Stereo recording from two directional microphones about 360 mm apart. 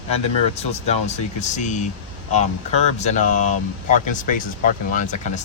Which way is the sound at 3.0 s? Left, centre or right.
Centre.